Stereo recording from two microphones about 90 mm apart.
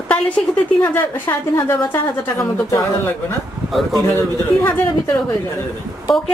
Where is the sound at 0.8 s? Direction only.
20° left (ahead or behind).